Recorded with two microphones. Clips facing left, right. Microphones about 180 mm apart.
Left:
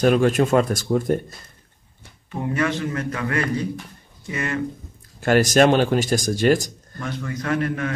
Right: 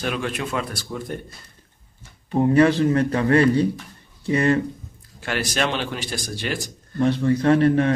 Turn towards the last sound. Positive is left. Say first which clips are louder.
# right 7 dB
turn(degrees=-30)  # may be behind; listen again after turning